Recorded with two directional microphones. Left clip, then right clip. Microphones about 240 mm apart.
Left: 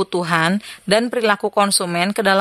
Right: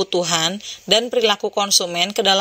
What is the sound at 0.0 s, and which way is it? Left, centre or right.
Speech, centre.